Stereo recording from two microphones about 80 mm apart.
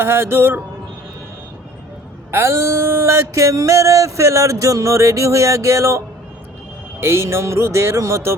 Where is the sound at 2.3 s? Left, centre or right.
Right.